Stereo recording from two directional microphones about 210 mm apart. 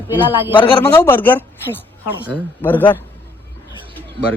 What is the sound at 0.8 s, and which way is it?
Speech, 10° left (ahead or behind).